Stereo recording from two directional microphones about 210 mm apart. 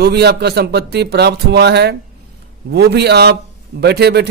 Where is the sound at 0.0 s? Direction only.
50° right (ahead or behind).